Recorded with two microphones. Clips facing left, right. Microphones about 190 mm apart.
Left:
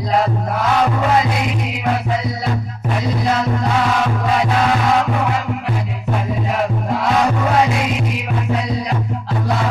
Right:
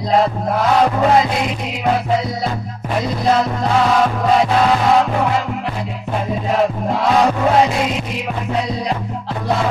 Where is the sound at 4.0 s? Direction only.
35° right (ahead or behind).